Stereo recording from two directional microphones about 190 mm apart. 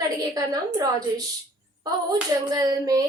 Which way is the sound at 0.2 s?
20° right (ahead or behind).